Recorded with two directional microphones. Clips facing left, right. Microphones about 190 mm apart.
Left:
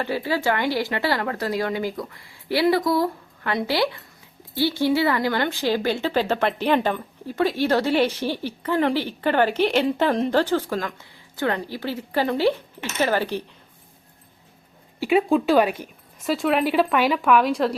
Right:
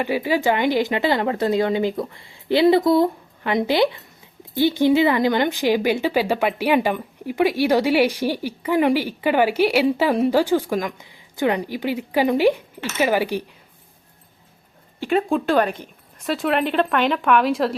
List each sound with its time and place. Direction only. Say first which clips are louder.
0.0 s speech: right 3 dB; 15° right (ahead or behind)
15.0 s a woman's voice: left 1 dB; 5° left (ahead or behind)